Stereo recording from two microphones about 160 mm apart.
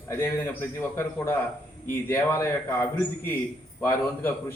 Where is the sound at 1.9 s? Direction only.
15° left (ahead or behind).